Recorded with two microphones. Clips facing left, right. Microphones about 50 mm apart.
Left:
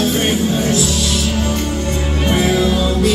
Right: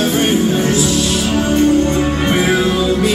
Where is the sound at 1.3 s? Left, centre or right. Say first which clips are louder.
Right 7 dB; right.